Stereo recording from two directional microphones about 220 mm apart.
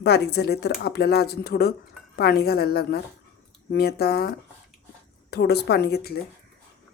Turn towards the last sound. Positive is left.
turn(degrees=45)  # may be behind; listen again after turning